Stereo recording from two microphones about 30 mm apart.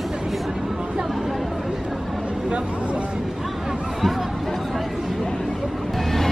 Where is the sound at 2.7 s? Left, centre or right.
Right.